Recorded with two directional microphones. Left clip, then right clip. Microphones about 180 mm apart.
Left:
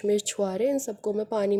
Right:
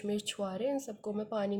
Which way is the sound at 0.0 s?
40° left (ahead or behind).